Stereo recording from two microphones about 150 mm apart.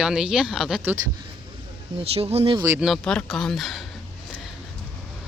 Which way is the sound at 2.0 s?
40° right (ahead or behind).